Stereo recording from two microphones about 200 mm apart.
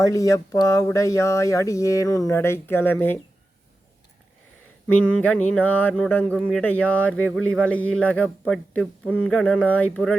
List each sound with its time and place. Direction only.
0.0 s speech: 15° left (ahead or behind)
4.9 s a man's voice: 5° left (ahead or behind)